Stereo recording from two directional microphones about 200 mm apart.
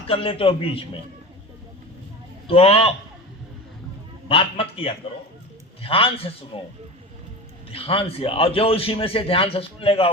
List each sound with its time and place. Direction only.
0.1 s a man's voice: 25° left (ahead or behind)
2.5 s a man's voice: 30° left (ahead or behind)
4.3 s a man's voice: 30° left (ahead or behind)
7.7 s a man's voice: 30° left (ahead or behind)